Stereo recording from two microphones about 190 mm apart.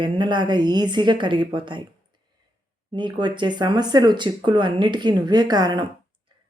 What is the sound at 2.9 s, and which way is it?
Speech, 25° right (ahead or behind).